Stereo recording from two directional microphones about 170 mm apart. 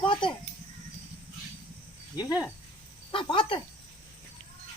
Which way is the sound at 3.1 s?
30° left (ahead or behind).